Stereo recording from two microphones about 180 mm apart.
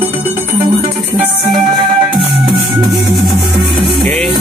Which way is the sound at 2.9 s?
Centre (ahead or behind).